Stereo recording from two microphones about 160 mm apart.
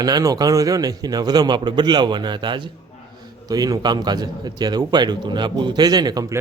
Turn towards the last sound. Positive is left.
turn(degrees=-20)  # may be behind; listen again after turning